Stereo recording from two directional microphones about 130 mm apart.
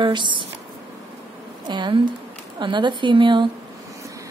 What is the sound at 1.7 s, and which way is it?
A woman's voice, 35° right (ahead or behind).